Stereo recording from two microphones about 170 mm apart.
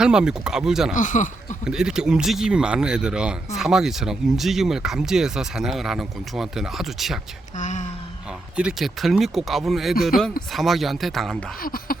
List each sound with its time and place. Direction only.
0.0 s speech: 5° right (ahead or behind)
0.9 s speech: 45° left (ahead or behind)
1.6 s speech: 5° right (ahead or behind)
7.5 s a sound: 45° left (ahead or behind)
8.5 s speech: 5° right (ahead or behind)
11.6 s speech: 55° left (ahead or behind)